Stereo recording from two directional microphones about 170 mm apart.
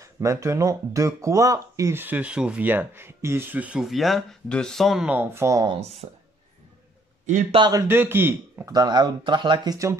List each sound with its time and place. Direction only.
0.0 s speech: 20° right (ahead or behind)
5.7 s speech: 35° right (ahead or behind)
7.5 s speech: 25° right (ahead or behind)
7.9 s speech: 10° right (ahead or behind)